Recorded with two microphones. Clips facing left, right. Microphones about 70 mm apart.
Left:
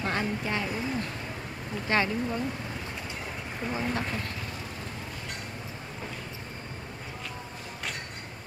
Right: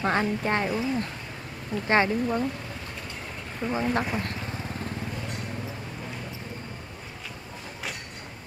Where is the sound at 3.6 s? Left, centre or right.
Centre.